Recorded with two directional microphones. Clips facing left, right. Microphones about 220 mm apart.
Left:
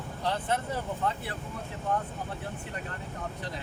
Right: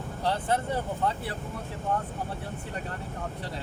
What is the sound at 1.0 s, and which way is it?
Speech, 35° right (ahead or behind).